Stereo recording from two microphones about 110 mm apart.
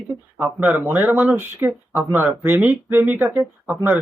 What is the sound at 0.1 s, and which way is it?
Speech, 15° right (ahead or behind).